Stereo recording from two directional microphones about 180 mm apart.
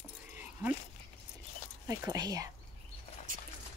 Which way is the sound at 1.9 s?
15° right (ahead or behind).